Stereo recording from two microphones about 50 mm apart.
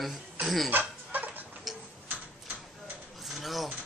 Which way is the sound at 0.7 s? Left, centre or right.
Right.